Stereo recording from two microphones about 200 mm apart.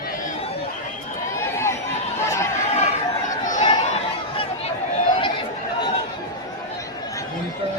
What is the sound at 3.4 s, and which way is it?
Chatter, 40° left (ahead or behind).